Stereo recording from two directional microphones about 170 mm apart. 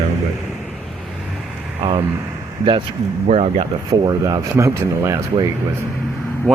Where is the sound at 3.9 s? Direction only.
20° right (ahead or behind).